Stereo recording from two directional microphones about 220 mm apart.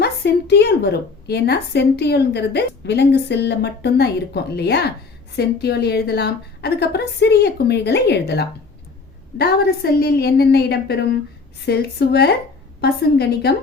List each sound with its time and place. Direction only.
0.0 s a woman's voice: 50° left (ahead or behind)